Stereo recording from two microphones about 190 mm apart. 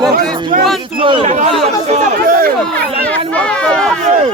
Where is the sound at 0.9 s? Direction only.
25° right (ahead or behind); by 2.5 s 45° right (ahead or behind).